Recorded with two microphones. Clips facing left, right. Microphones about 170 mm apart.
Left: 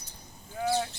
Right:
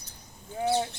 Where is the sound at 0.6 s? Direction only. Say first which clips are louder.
Right 2 dB; 25° right (ahead or behind).